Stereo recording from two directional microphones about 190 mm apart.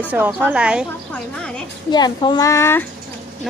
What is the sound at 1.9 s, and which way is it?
Speech, 20° left (ahead or behind).